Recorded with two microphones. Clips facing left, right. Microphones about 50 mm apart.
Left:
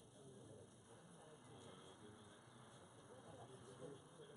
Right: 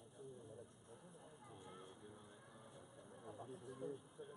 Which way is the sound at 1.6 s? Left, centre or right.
Centre.